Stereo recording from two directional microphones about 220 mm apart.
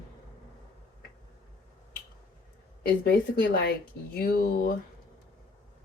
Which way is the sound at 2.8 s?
45° left (ahead or behind).